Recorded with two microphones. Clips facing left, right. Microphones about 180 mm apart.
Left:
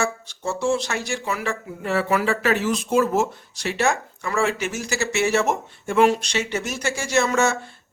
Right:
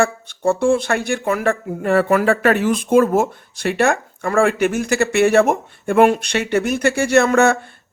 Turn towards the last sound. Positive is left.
turn(degrees=-55)  # may be behind; listen again after turning